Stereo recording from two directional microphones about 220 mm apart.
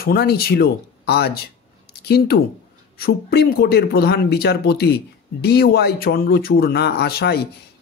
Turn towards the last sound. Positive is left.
turn(degrees=45)  # may be behind; listen again after turning